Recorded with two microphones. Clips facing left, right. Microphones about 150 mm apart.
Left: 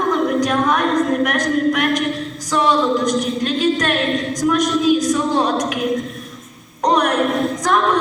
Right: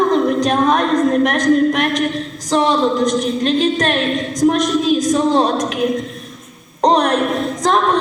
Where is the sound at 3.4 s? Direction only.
25° right (ahead or behind).